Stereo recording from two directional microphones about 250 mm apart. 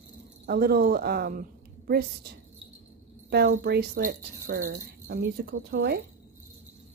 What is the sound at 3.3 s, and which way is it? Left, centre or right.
Speech, right.